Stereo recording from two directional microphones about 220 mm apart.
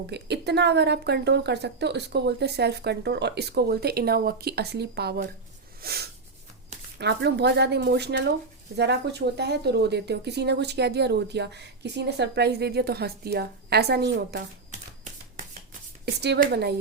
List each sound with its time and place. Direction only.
0.1 s a woman's voice: 50° right (ahead or behind)
5.8 s snort: 45° right (ahead or behind)
7.0 s a woman's voice: 50° right (ahead or behind)
14.7 s typewriter: 35° right (ahead or behind)
16.0 s a woman's voice: 50° right (ahead or behind)